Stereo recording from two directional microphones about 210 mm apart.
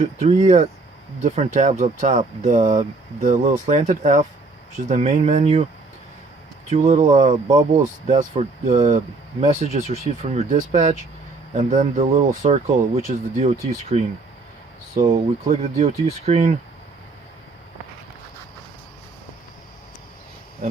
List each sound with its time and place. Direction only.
0.0 s speech: 30° right (ahead or behind)
6.7 s speech: 30° right (ahead or behind)